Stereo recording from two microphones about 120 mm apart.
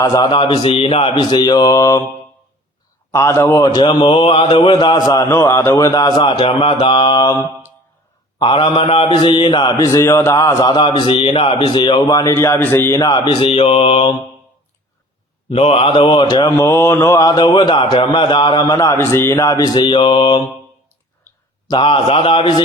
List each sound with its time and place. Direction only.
0.0 s speech: 35° left (ahead or behind)
3.1 s speech: 25° left (ahead or behind)
5.3 s a man's voice: 25° left (ahead or behind); by 9.7 s 40° left (ahead or behind)
9.7 s speech: 30° left (ahead or behind); by 12.0 s 45° left (ahead or behind)
12.0 s a man's voice: 30° left (ahead or behind)
13.0 s a man's voice: 40° left (ahead or behind)
15.4 s a man's voice: 55° left (ahead or behind)
16.6 s speech: 20° left (ahead or behind)
18.9 s speech: 20° left (ahead or behind); by 20.4 s 45° left (ahead or behind)
21.7 s a man's voice: 45° left (ahead or behind)